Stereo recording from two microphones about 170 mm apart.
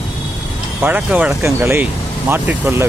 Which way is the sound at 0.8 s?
10° right (ahead or behind).